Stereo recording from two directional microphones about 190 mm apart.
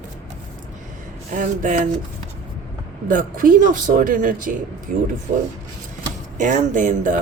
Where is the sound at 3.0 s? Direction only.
45° right (ahead or behind).